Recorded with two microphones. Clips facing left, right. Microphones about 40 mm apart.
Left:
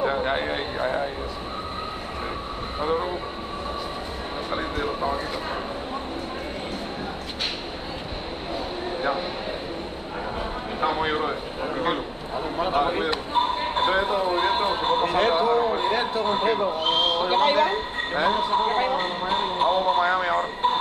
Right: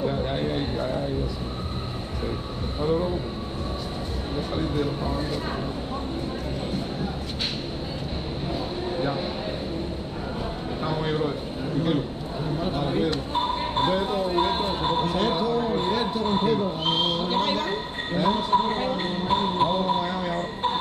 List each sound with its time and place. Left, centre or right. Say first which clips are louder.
0.0 s speech: left 2 dB; left
2.8 s speech: right 1 dB; left
4.5 s speech: even; left
10.8 s speech: left 3 dB; left
17.1 s speech: left 4 dB; left
17.6 s speech: left 3 dB; left